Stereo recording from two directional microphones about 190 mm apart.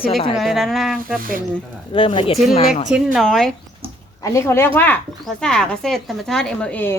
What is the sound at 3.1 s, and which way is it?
Speech, centre (ahead or behind).